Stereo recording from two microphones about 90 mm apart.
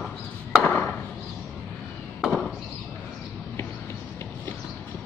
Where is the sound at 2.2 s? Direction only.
Centre (ahead or behind).